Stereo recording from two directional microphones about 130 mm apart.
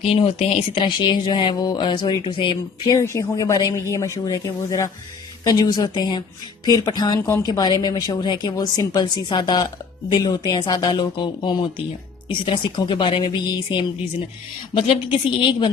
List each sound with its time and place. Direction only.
0.1 s speech: 45° left (ahead or behind)
2.9 s speech: 20° left (ahead or behind); by 13.8 s 40° left (ahead or behind)
15.4 s speech: 40° left (ahead or behind)